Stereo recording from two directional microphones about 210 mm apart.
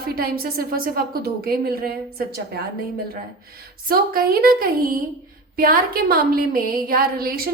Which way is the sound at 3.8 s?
45° right (ahead or behind).